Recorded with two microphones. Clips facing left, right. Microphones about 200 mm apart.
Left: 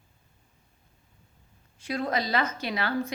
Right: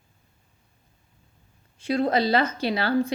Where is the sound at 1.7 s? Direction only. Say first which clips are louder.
Right 6 dB; 30° right (ahead or behind).